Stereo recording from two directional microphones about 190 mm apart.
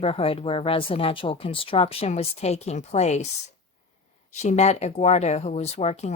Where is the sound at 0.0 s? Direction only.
30° left (ahead or behind).